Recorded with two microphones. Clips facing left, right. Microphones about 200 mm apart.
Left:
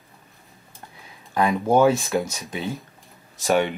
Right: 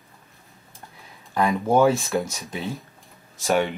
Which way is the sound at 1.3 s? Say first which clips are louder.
Left 1 dB; centre (ahead or behind).